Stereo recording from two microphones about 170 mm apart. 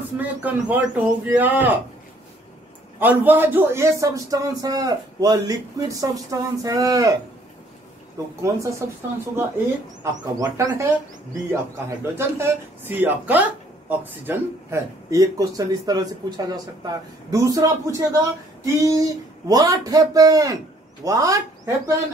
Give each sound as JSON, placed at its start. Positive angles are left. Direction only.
{"t": 0.2, "sound": "speech", "side_deg": -10}
{"t": 3.0, "sound": "speech", "side_deg": -10}
{"t": 8.4, "sound": "speech", "side_deg": -15}
{"t": 10.2, "sound": "speech", "side_deg": -25}
{"t": 12.0, "sound": "speech", "side_deg": -15}